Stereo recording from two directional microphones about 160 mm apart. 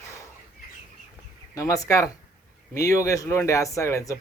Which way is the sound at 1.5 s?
20° left (ahead or behind).